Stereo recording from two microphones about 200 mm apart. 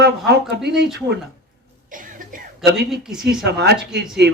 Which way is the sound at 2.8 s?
Centre (ahead or behind).